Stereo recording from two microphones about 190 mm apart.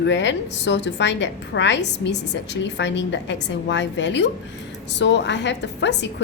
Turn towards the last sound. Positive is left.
turn(degrees=65)  # may be behind; listen again after turning